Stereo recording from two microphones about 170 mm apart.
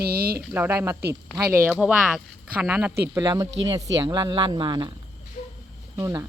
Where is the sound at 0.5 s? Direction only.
10° right (ahead or behind).